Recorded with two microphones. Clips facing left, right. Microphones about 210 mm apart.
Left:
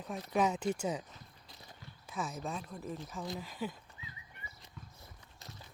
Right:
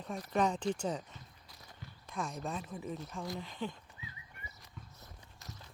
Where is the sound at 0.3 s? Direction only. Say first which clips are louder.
Even; 5° left (ahead or behind).